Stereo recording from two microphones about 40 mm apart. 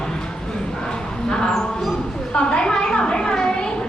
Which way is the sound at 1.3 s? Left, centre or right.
Centre.